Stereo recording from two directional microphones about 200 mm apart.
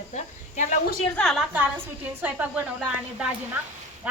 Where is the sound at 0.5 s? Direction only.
40° left (ahead or behind).